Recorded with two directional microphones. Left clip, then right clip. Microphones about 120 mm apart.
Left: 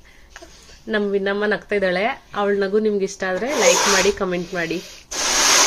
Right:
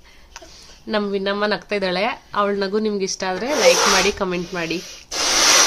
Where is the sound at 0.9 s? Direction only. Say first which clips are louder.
Left 1 dB; 20° right (ahead or behind).